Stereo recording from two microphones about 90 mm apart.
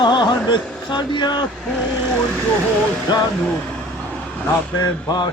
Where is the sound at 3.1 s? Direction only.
55° left (ahead or behind).